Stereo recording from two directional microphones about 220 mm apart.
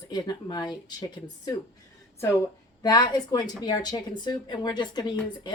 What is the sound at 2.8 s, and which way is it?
Speech, 20° left (ahead or behind).